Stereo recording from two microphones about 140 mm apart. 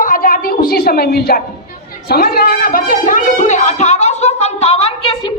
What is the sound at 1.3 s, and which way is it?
A woman's voice, 90° left.